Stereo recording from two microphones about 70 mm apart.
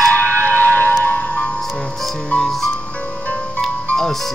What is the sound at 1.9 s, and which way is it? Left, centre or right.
Music, centre.